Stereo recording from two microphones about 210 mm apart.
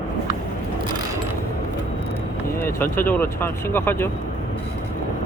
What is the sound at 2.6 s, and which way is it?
Speech, 10° left (ahead or behind).